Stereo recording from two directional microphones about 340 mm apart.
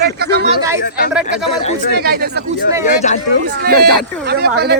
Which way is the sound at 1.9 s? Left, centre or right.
Right.